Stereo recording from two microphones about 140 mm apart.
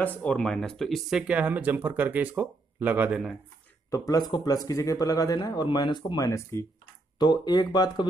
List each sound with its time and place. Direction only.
0.0 s speech: 10° left (ahead or behind)
3.9 s speech: 25° left (ahead or behind)
6.2 s speech: 20° left (ahead or behind)